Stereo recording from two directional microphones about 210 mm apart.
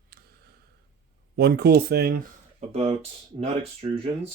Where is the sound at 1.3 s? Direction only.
50° right (ahead or behind).